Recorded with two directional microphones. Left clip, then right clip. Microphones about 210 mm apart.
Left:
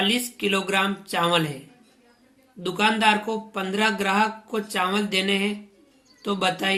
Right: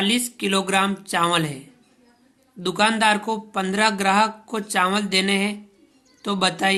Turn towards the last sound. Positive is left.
turn(degrees=-35)  # may be behind; listen again after turning